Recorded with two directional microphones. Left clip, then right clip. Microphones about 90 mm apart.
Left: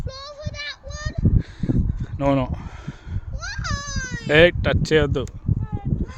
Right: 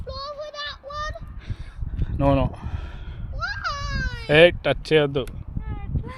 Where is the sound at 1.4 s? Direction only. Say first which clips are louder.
Left 17 dB; 65° left (ahead or behind); by 2.4 s 90° left.